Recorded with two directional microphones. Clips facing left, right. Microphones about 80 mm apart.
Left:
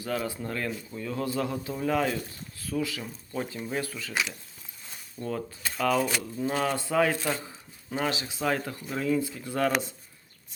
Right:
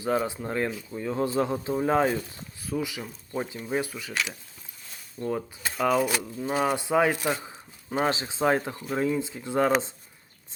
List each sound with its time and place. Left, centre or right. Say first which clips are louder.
0.0 s speech: right 4 dB; right
2.6 s speech: even; centre
5.2 s speech: right 3 dB; centre
8.0 s speech: right 4 dB; right